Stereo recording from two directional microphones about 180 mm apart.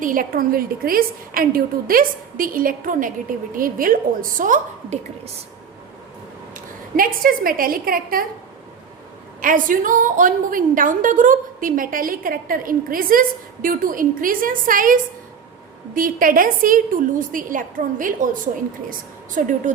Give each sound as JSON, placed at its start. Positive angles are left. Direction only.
{"t": 0.0, "sound": "a woman's voice", "side_deg": -50}
{"t": 6.5, "sound": "a woman's voice", "side_deg": -50}
{"t": 9.4, "sound": "a woman's voice", "side_deg": -50}
{"t": 16.0, "sound": "a woman's voice", "side_deg": -50}